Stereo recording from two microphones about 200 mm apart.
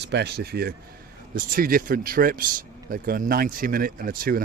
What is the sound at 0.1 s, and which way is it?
Speech, 55° right (ahead or behind).